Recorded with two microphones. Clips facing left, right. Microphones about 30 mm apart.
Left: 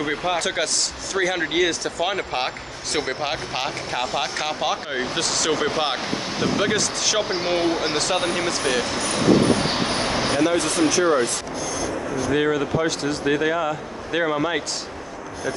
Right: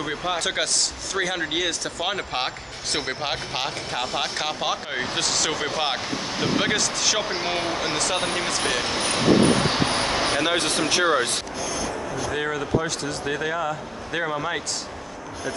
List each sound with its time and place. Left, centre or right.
0.0 s speech: centre
0.4 s speech: centre
8.8 s speech: right
9.7 s vehicle: centre
10.2 s vehicle: right
10.9 s speech: right
12.3 s speech: centre